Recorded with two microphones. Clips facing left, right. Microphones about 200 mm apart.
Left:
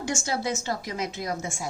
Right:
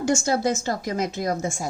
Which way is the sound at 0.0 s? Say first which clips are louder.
Right 7 dB; 45° right (ahead or behind).